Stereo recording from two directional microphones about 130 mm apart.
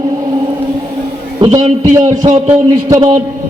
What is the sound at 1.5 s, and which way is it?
Speech, 65° right (ahead or behind).